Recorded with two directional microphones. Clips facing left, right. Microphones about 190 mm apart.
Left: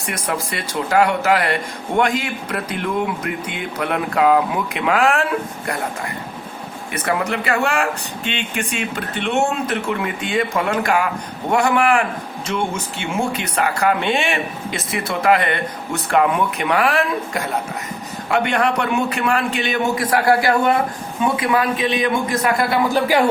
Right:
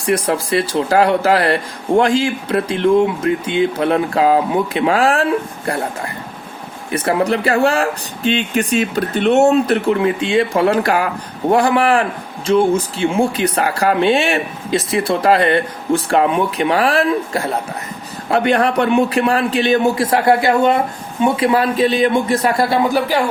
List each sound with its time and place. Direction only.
0.0 s speech: 30° right (ahead or behind)
6.9 s speech: 30° right (ahead or behind)